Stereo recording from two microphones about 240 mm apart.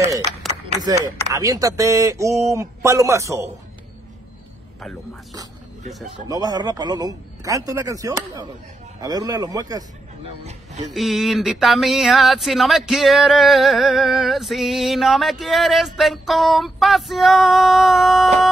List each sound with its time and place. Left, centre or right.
0.4 s a sound: centre
1.3 s speech: centre
6.2 s speech: centre
10.4 s a man's voice: right
10.9 s speech: centre